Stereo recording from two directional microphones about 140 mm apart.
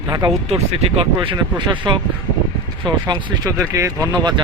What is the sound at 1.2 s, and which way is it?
Speech, 35° right (ahead or behind).